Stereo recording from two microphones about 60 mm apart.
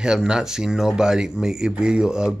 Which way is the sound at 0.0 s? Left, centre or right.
Centre.